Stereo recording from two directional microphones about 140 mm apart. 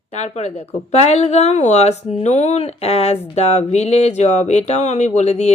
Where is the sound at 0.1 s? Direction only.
50° left (ahead or behind).